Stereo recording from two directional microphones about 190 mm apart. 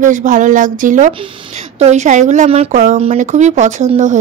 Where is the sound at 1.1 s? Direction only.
30° right (ahead or behind).